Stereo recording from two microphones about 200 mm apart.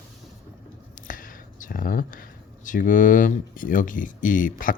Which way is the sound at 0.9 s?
40° left (ahead or behind).